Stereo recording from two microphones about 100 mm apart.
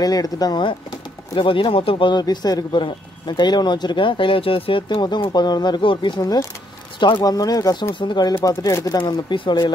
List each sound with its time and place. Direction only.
0.0 s speech: 40° left (ahead or behind)
1.3 s speech: 55° left (ahead or behind); by 7.8 s 40° left (ahead or behind)
7.9 s speech: 50° left (ahead or behind)
8.5 s speech: 35° left (ahead or behind)